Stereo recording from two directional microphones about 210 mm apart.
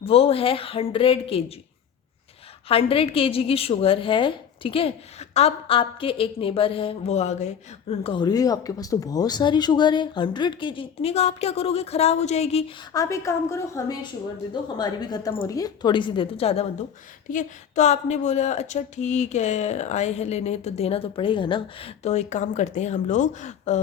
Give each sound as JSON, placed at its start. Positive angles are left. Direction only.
{"t": 0.0, "sound": "a woman's voice", "side_deg": 25}
{"t": 2.6, "sound": "a woman's voice", "side_deg": 25}
{"t": 12.9, "sound": "a woman's voice", "side_deg": 15}